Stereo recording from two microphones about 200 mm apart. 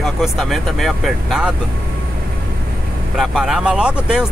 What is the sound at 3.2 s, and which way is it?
Speech, centre (ahead or behind).